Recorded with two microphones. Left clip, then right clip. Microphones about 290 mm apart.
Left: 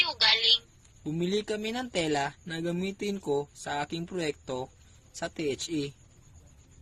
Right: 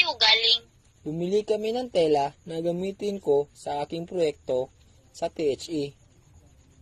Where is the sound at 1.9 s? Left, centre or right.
Left.